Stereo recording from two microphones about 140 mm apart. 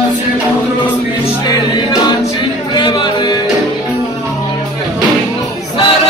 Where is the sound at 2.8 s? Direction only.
35° left (ahead or behind).